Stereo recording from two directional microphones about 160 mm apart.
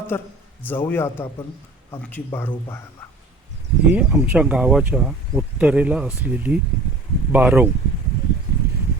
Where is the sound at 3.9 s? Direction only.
5° right (ahead or behind).